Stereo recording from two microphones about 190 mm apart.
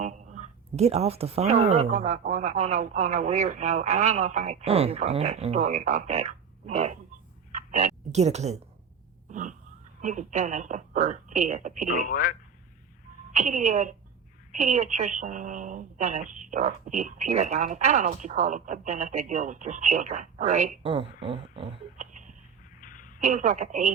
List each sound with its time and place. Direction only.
0.0 s a woman's voice: 40° right (ahead or behind)
9.3 s dog: 40° right (ahead or behind)
10.0 s a woman's voice: 40° right (ahead or behind)
11.9 s speech: 45° left (ahead or behind)
13.3 s a woman's voice: 40° right (ahead or behind)
22.8 s a sound: 45° left (ahead or behind)
23.2 s a woman's voice: 40° right (ahead or behind)